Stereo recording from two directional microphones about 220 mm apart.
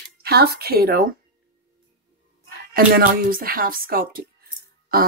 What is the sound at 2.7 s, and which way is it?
A woman's voice, 40° right (ahead or behind).